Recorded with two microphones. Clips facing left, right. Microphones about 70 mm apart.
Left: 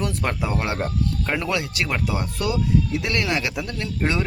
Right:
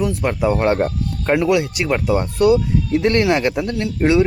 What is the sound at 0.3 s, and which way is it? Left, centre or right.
Speech, right.